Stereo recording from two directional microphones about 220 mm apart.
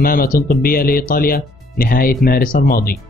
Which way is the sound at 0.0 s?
40° left (ahead or behind).